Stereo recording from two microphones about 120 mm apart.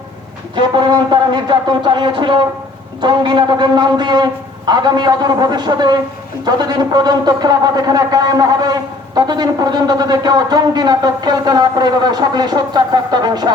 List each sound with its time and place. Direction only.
0.5 s speech: 40° right (ahead or behind)